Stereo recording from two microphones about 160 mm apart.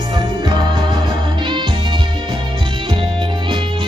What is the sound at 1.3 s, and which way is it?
Music, 30° right (ahead or behind).